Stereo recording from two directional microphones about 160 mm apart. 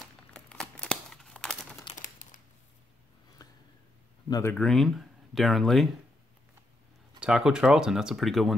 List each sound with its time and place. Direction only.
0.0 s crumpling: 5° left (ahead or behind)
2.0 s crumpling: 60° left (ahead or behind)
3.4 s a sound: 25° left (ahead or behind)
4.3 s speech: 15° left (ahead or behind)
4.6 s speech: centre (ahead or behind)
7.2 s speech: 5° right (ahead or behind)